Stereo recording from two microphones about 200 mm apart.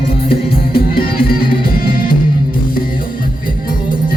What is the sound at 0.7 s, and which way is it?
Music, 50° left (ahead or behind).